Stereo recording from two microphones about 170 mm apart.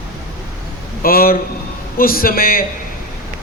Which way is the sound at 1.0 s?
60° left (ahead or behind).